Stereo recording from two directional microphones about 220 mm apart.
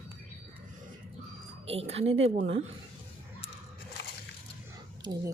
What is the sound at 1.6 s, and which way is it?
Speech, 25° right (ahead or behind).